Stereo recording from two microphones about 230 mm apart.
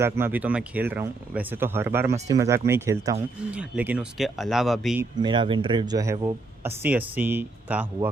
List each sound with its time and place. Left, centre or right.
0.0 s speech: centre
5.2 s speech: right